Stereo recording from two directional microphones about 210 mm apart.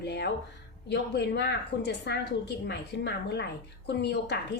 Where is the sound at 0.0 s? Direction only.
50° left (ahead or behind).